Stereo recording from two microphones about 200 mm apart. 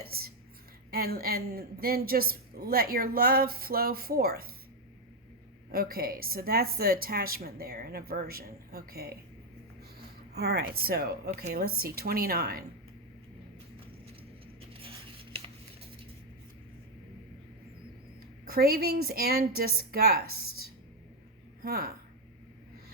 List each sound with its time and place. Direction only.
0.0 s a woman's voice: 50° right (ahead or behind)
5.7 s a woman's voice: 50° right (ahead or behind)
10.3 s a woman's voice: 55° right (ahead or behind)
14.7 s a sound: 25° right (ahead or behind)
18.4 s a woman's voice: 50° right (ahead or behind)
21.6 s a woman's voice: 50° right (ahead or behind)